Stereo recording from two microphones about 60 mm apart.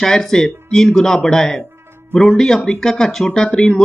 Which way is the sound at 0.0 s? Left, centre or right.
Centre.